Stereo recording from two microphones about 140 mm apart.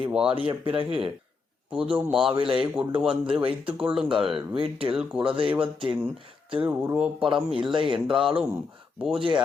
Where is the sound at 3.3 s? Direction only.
40° right (ahead or behind).